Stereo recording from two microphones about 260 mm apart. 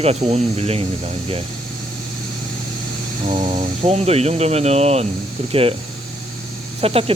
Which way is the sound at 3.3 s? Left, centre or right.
Right.